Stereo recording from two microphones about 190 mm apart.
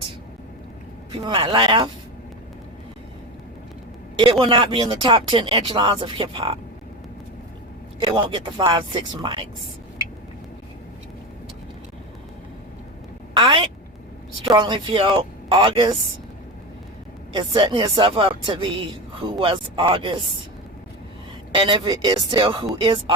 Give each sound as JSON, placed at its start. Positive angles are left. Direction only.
{"t": 1.1, "sound": "speech", "side_deg": -25}
{"t": 4.2, "sound": "speech", "side_deg": -25}
{"t": 8.0, "sound": "speech", "side_deg": -25}
{"t": 13.3, "sound": "a sound", "side_deg": -25}
{"t": 14.5, "sound": "speech", "side_deg": -25}
{"t": 17.3, "sound": "speech", "side_deg": -25}
{"t": 21.5, "sound": "speech", "side_deg": -25}